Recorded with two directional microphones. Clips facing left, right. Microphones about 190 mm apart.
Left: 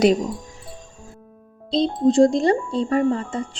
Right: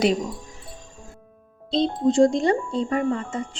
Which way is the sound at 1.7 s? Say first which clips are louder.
Left 3 dB; 35° left (ahead or behind).